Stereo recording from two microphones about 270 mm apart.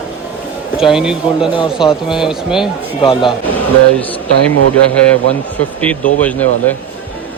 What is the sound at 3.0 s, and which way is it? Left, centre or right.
Speech, centre.